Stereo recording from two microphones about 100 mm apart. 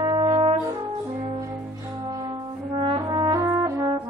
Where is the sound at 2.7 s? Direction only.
60° right (ahead or behind).